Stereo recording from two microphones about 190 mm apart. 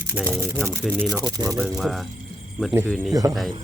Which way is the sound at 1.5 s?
Centre (ahead or behind).